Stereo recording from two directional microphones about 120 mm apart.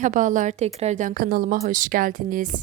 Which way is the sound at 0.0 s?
90° right.